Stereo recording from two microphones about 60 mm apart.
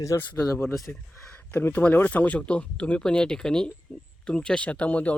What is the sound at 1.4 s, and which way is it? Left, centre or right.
Speech, left.